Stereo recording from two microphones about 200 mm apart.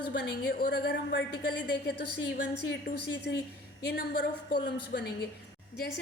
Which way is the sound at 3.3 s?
55° left (ahead or behind).